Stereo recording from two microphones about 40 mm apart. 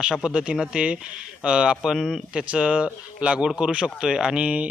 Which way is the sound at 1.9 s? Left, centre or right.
Centre.